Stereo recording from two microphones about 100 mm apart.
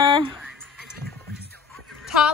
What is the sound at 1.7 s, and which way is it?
Music, 5° left (ahead or behind).